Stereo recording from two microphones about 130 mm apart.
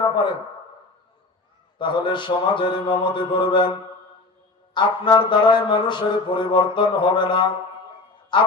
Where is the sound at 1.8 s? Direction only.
40° left (ahead or behind).